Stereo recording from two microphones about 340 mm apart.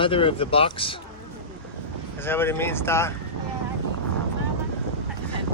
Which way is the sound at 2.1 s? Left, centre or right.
Centre.